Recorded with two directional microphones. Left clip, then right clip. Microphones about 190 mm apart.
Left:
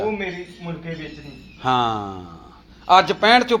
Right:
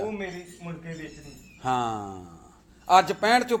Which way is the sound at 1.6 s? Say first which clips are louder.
Left 7 dB; 5° right (ahead or behind).